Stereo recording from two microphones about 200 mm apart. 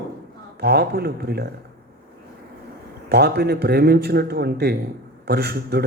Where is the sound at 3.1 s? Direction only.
55° right (ahead or behind).